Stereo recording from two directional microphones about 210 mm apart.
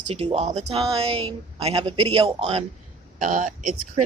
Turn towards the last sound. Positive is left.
turn(degrees=-35)  # may be behind; listen again after turning